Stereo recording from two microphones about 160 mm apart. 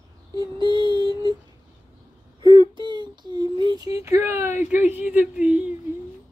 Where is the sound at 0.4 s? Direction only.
30° right (ahead or behind).